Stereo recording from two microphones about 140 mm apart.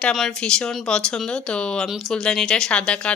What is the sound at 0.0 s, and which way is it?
Speech, 5° left (ahead or behind).